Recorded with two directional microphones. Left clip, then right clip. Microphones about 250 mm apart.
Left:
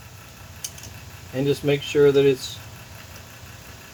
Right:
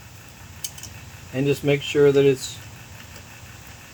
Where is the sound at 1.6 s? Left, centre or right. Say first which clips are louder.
Even; centre.